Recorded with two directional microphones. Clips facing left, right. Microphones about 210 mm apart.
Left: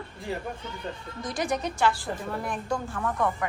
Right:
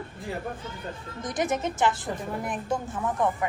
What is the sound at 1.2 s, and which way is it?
A woman's voice, 20° right (ahead or behind).